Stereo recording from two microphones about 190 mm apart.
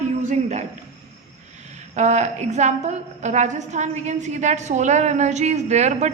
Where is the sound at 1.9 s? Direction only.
35° right (ahead or behind).